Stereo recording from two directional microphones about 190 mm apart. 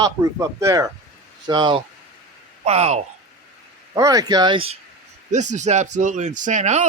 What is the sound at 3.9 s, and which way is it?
Speech, 20° right (ahead or behind).